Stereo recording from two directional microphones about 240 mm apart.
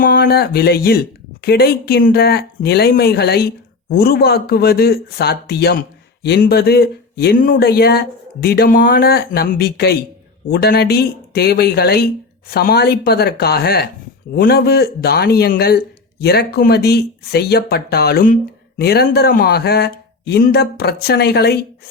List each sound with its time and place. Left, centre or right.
0.0 s speech: left